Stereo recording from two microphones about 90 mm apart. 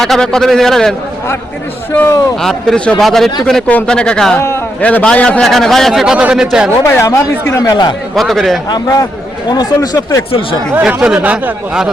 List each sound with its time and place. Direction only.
0.0 s a man's voice: 5° left (ahead or behind)
1.9 s speech: 25° left (ahead or behind)
2.4 s a man's voice: 5° left (ahead or behind)
4.4 s speech: 30° left (ahead or behind)
4.8 s speech: 15° left (ahead or behind)
5.4 s a man's voice: 5° left (ahead or behind)
6.8 s speech: 30° left (ahead or behind)
7.6 s speech: 50° left (ahead or behind)
8.1 s a man's voice: centre (ahead or behind)
8.7 s speech: 45° left (ahead or behind)
10.8 s speech: 10° right (ahead or behind)